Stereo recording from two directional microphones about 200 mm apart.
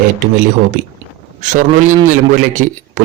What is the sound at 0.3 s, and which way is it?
Speech, 40° right (ahead or behind).